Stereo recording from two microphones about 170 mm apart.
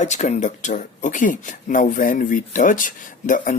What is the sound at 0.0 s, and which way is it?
Speech, 45° left (ahead or behind).